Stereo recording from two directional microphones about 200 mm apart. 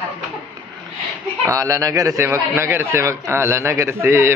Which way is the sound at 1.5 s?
15° right (ahead or behind).